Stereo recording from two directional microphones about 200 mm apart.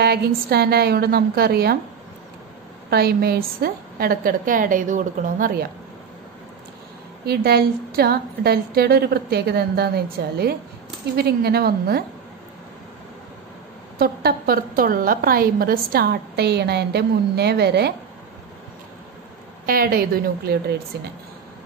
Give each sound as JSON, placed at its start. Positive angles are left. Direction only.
{"t": 0.0, "sound": "a woman's voice", "side_deg": -50}
{"t": 2.9, "sound": "a woman's voice", "side_deg": -50}
{"t": 7.2, "sound": "a woman's voice", "side_deg": -50}
{"t": 13.9, "sound": "a woman's voice", "side_deg": -50}
{"t": 19.6, "sound": "a woman's voice", "side_deg": -50}